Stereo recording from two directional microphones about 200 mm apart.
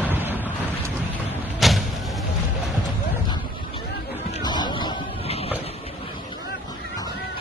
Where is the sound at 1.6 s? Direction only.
Centre (ahead or behind).